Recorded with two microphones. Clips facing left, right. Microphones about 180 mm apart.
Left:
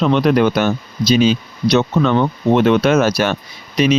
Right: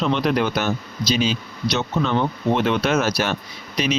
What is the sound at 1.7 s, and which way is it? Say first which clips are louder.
Speech: left 8 dB; 60° left (ahead or behind).